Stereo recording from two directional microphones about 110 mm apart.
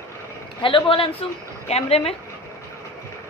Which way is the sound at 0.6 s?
50° left (ahead or behind).